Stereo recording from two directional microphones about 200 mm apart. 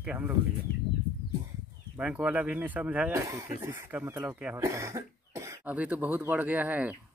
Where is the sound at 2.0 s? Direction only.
5° right (ahead or behind).